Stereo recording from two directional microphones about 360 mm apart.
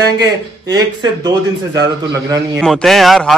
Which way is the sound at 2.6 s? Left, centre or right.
Centre.